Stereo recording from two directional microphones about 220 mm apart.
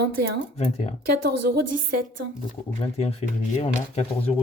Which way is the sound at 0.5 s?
30° left (ahead or behind).